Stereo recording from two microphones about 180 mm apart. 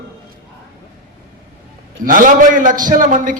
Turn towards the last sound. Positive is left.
turn(degrees=-50)  # may be behind; listen again after turning